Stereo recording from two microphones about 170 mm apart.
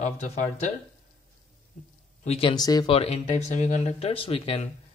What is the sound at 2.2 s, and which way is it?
Speech, 35° left (ahead or behind).